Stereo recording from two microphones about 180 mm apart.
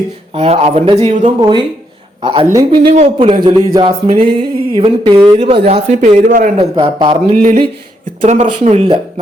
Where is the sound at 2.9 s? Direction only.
40° right (ahead or behind).